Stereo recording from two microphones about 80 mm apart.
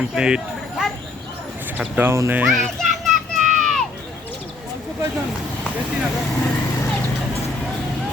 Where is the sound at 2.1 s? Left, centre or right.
Right.